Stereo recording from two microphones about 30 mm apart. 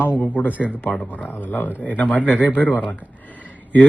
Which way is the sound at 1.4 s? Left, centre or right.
Left.